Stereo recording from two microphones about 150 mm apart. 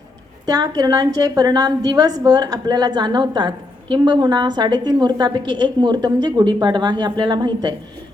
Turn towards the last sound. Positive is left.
turn(degrees=-30)  # may be behind; listen again after turning